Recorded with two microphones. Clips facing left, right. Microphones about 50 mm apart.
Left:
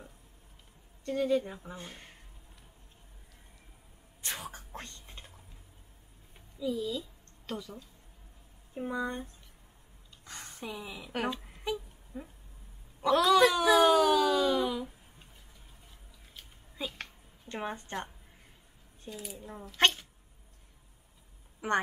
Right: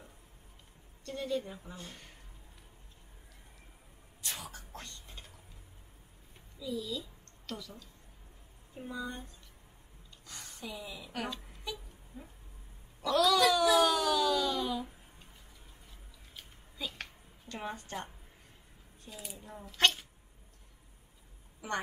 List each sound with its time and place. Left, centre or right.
1.0 s a woman's voice: left
4.2 s whispering: left
6.6 s a woman's voice: left
10.2 s a sound: left
10.6 s a woman's voice: centre
13.0 s wail: left
14.0 s a sound: centre
17.5 s a woman's voice: left
19.0 s speech: centre